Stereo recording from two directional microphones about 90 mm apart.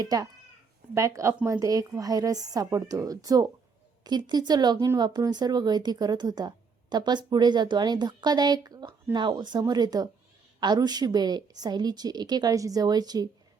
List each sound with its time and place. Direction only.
0.0 s a woman's voice: 45° right (ahead or behind)
9.1 s a woman's voice: 60° right (ahead or behind)